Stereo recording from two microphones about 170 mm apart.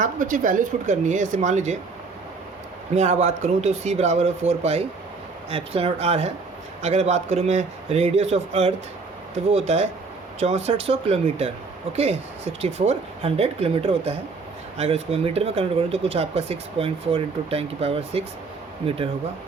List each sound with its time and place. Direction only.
0.0 s speech: 50° right (ahead or behind)
2.9 s speech: 40° right (ahead or behind)
12.8 s speech: 40° right (ahead or behind)